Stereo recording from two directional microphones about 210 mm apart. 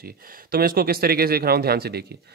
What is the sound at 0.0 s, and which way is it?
Speech, 45° right (ahead or behind).